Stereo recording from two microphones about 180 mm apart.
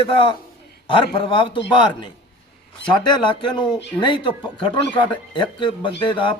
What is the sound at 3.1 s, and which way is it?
A man's voice, 25° left (ahead or behind).